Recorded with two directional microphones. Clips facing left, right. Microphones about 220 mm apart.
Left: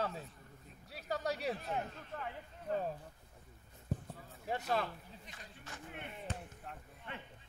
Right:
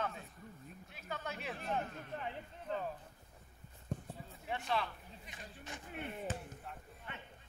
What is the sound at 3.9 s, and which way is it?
Clip-clop, 5° left (ahead or behind).